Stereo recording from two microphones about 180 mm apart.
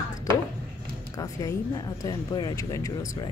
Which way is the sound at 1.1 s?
20° left (ahead or behind).